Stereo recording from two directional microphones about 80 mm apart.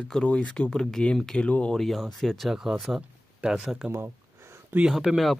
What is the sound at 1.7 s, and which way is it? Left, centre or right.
Speech, centre.